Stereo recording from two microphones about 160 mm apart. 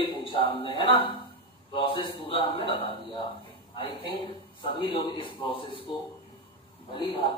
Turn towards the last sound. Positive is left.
turn(degrees=30)  # may be behind; listen again after turning